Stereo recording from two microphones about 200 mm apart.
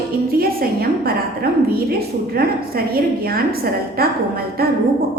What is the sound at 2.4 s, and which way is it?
A woman's voice, 50° right (ahead or behind).